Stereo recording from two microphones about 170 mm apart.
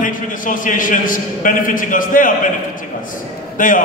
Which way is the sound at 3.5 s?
50° left (ahead or behind).